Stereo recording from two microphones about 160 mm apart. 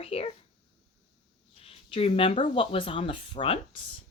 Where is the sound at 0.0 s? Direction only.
35° left (ahead or behind).